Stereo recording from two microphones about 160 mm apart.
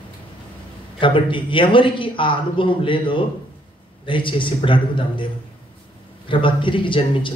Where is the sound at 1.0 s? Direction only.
30° left (ahead or behind).